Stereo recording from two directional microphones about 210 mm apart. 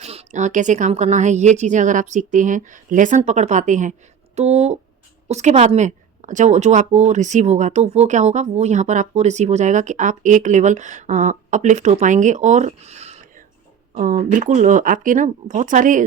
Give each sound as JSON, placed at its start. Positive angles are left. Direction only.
{"t": 0.0, "sound": "speech", "side_deg": -30}